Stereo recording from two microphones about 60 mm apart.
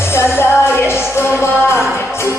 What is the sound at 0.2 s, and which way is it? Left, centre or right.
Music, left.